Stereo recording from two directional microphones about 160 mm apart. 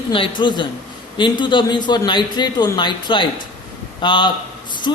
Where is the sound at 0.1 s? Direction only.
30° left (ahead or behind).